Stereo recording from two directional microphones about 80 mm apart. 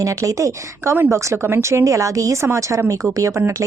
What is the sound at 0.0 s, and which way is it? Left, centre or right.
Speech, right.